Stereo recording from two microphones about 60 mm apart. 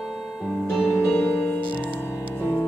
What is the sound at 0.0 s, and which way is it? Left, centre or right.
Music, centre.